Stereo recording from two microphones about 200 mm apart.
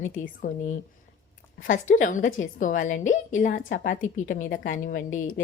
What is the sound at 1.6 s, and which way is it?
A woman's voice, 40° left (ahead or behind).